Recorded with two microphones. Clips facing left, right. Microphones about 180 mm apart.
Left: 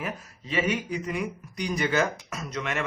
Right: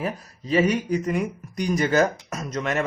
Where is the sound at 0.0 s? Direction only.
35° right (ahead or behind).